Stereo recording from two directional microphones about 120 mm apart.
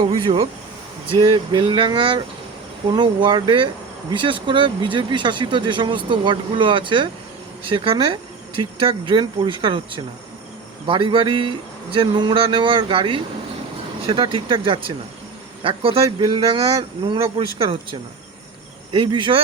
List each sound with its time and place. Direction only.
0.0 s speech: 45° right (ahead or behind)
19.1 s speech: 45° right (ahead or behind)